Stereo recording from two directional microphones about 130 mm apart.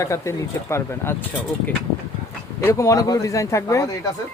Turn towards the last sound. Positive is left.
turn(degrees=25)  # may be behind; listen again after turning